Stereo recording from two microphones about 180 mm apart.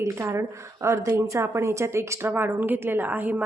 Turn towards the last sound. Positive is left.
turn(degrees=-10)  # may be behind; listen again after turning